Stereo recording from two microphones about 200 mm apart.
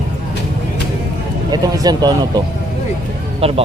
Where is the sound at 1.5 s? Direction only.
20° right (ahead or behind).